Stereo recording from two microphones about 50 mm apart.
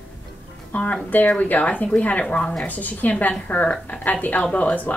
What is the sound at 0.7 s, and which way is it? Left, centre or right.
A woman's voice, left.